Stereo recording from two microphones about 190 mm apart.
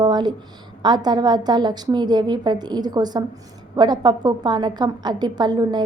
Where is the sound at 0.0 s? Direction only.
20° right (ahead or behind).